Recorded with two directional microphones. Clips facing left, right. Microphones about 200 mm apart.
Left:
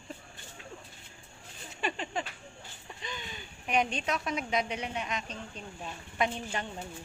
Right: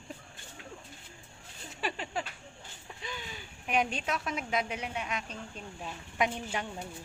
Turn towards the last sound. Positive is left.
turn(degrees=-10)  # may be behind; listen again after turning